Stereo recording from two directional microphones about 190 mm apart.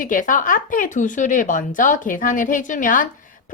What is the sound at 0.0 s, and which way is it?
A woman's voice, 45° left (ahead or behind).